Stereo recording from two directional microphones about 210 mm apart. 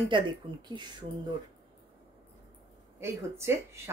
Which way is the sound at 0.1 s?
20° right (ahead or behind).